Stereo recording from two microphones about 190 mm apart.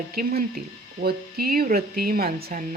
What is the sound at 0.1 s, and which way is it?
Speech, 50° right (ahead or behind).